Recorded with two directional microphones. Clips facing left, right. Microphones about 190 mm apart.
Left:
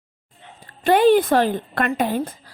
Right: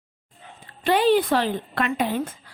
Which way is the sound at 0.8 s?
50° left (ahead or behind).